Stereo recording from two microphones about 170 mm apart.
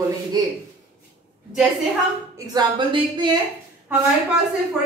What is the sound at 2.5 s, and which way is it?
Speech, 25° right (ahead or behind).